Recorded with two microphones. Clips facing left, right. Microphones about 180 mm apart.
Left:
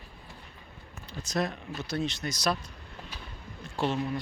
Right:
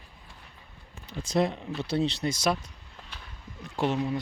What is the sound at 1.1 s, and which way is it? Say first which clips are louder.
Speech: right 5 dB; 25° right (ahead or behind).